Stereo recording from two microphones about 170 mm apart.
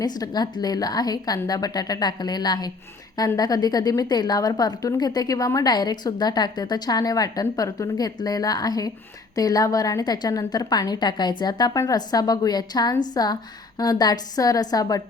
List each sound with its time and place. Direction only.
0.0 s a woman's voice: 25° left (ahead or behind)